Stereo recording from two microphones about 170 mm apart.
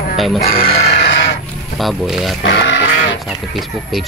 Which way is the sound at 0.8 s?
80° left.